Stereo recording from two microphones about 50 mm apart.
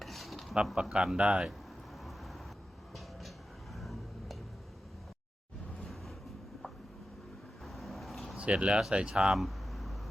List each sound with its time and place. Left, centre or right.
0.0 s zipper: centre
0.8 s speech: centre
1.5 s a sound: centre
2.9 s music: centre
7.6 s vehicle: centre
8.4 s speech: right
9.3 s a sound: centre